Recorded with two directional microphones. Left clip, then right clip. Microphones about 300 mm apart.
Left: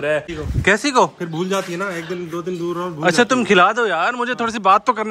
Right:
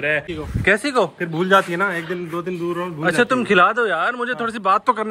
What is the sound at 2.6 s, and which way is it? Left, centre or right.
A man's voice, centre.